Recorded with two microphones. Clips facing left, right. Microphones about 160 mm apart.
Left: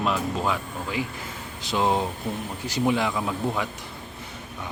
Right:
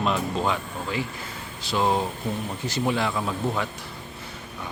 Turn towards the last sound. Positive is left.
turn(degrees=0)  # may be behind; listen again after turning